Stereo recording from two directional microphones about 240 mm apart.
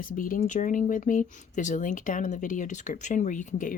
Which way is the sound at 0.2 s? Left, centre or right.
Left.